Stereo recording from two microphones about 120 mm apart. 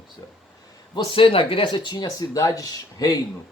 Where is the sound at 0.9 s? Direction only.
40° left (ahead or behind).